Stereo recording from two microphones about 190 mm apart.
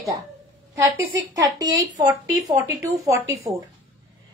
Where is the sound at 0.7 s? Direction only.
15° right (ahead or behind).